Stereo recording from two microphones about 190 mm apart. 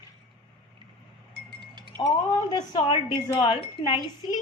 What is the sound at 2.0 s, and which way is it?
Speech, 20° left (ahead or behind).